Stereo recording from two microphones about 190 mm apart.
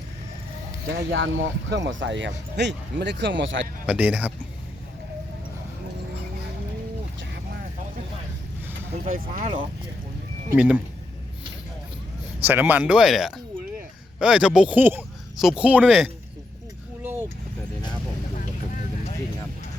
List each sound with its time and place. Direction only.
0.9 s speech: 85° right
3.8 s speech: 5° right (ahead or behind)
9.0 s speech: 45° right (ahead or behind)
10.5 s speech: 5° right (ahead or behind)
12.5 s speech: 10° right (ahead or behind)
17.0 s a sound: 10° right (ahead or behind)
18.3 s vehicle: 45° left (ahead or behind)